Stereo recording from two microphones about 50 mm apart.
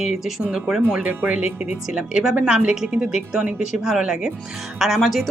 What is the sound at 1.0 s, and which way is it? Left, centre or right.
Speech, right.